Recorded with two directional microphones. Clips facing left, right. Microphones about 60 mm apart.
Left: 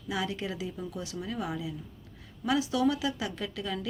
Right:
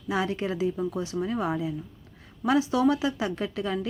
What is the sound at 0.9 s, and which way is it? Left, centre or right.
A woman's voice, right.